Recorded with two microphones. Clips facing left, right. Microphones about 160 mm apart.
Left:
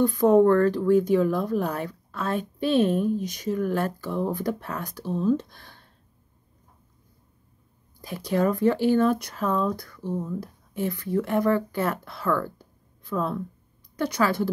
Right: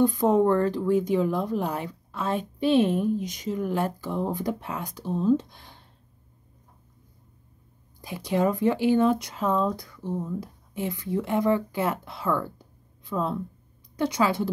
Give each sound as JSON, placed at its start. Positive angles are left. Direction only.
{"t": 0.0, "sound": "speech", "side_deg": -15}
{"t": 8.0, "sound": "speech", "side_deg": -15}